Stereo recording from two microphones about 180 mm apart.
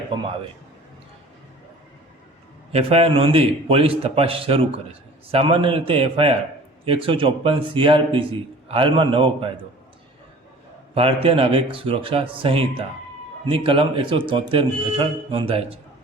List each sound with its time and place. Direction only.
2.7 s a man's voice: 35° right (ahead or behind)
10.9 s a man's voice: 30° right (ahead or behind)